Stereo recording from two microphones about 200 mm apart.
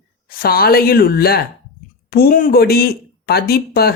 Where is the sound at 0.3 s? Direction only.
50° left (ahead or behind).